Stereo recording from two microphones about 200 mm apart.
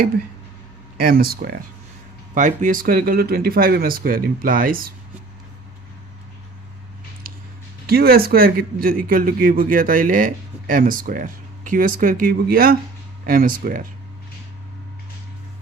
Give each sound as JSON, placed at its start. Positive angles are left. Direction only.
{"t": 0.9, "sound": "a man's voice", "side_deg": -45}
{"t": 7.9, "sound": "a man's voice", "side_deg": -50}